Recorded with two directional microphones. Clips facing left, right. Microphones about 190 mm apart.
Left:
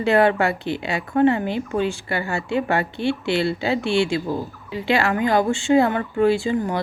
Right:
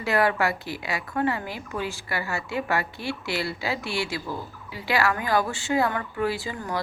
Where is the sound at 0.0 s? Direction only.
25° left (ahead or behind).